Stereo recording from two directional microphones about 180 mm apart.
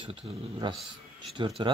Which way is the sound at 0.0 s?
30° right (ahead or behind).